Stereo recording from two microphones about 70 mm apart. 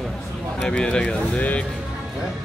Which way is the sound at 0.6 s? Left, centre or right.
Centre.